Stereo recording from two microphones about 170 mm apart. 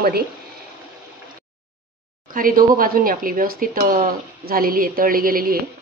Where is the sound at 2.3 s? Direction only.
55° right (ahead or behind).